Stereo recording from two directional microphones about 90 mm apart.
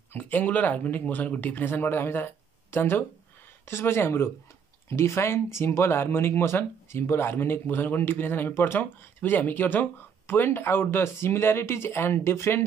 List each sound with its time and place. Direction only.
0.1 s speech: 20° left (ahead or behind)